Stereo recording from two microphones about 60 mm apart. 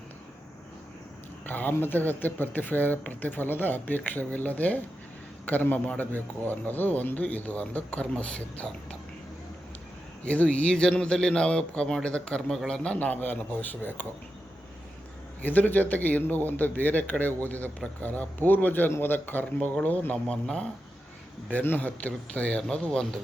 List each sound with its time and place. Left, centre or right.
1.5 s a man's voice: left
10.2 s a man's voice: left
15.4 s a man's voice: left
21.5 s a man's voice: left; by 23.2 s centre